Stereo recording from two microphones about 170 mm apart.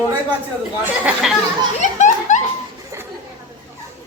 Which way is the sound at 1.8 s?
45° left (ahead or behind).